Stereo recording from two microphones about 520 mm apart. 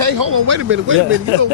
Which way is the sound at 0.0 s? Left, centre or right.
Right.